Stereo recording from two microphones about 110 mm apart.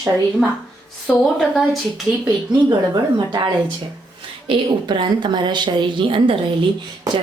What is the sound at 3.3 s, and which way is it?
A woman's voice, 40° right (ahead or behind).